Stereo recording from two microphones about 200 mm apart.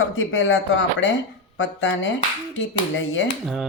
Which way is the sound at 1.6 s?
65° left (ahead or behind).